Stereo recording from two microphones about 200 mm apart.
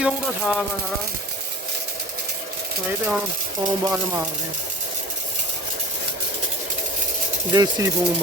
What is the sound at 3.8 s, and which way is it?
Speech, 15° right (ahead or behind).